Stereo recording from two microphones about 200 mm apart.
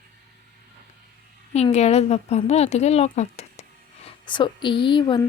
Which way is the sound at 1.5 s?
30° left (ahead or behind).